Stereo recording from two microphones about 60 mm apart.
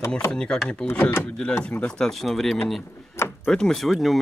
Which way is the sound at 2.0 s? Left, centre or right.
Centre.